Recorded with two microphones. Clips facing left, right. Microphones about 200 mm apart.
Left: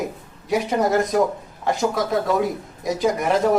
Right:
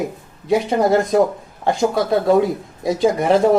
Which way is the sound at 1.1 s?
30° right (ahead or behind).